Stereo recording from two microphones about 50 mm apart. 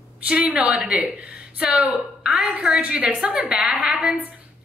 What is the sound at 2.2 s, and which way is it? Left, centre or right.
Speech, centre.